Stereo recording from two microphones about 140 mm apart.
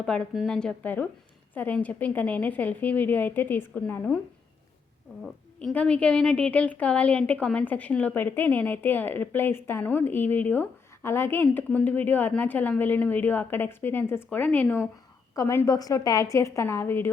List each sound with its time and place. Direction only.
0.0 s speech: 5° left (ahead or behind)
5.2 s a woman's voice: 5° left (ahead or behind)